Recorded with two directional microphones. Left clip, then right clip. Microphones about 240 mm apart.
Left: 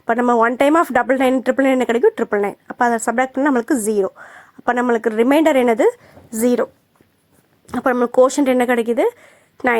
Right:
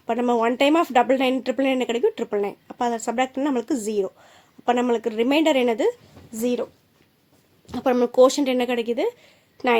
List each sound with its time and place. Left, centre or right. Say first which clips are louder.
0.1 s speech: left 6 dB; centre
7.7 s speech: left 4 dB; centre